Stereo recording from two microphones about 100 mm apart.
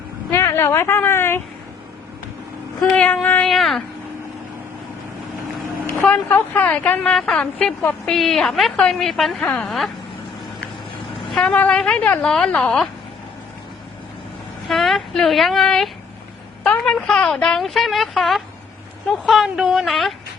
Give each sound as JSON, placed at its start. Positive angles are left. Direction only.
{"t": 0.3, "sound": "a woman's voice", "side_deg": 25}
{"t": 2.9, "sound": "a woman's voice", "side_deg": 15}
{"t": 3.4, "sound": "a woman's voice", "side_deg": 5}
{"t": 5.8, "sound": "a woman's voice", "side_deg": 20}
{"t": 11.3, "sound": "a woman's voice", "side_deg": 10}
{"t": 14.7, "sound": "a woman's voice", "side_deg": 0}